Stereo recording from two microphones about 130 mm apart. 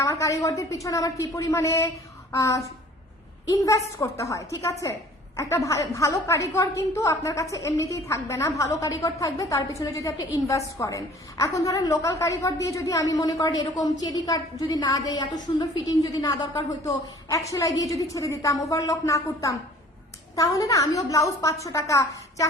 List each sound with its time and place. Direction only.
0.0 s a woman's voice: 25° left (ahead or behind)